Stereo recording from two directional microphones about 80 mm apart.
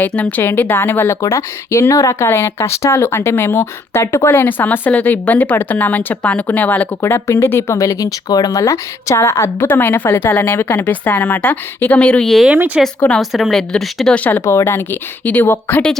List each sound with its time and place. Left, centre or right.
0.0 s speech: centre; by 4.3 s left
4.3 s speech: left
7.0 s speech: left; by 12.3 s centre
12.5 s speech: centre
13.1 s a woman's voice: centre
14.4 s speech: left